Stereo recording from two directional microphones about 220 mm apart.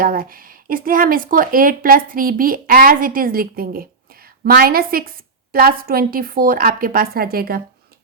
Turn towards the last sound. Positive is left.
turn(degrees=-45)  # may be behind; listen again after turning